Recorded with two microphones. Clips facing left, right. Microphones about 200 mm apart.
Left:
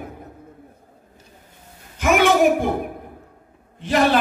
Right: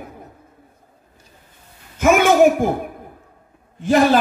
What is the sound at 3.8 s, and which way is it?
Speech, 45° right (ahead or behind).